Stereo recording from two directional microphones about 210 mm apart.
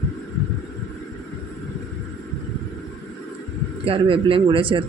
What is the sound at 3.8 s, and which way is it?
Speech, 25° right (ahead or behind).